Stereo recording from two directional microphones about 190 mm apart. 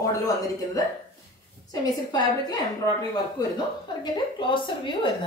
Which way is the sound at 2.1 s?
20° left (ahead or behind).